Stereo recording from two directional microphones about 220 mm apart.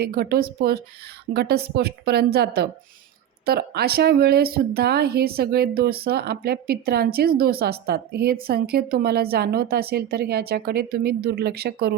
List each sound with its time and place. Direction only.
0.0 s speech: 45° right (ahead or behind)